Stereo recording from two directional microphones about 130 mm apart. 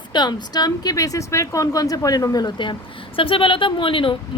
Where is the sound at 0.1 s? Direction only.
35° left (ahead or behind).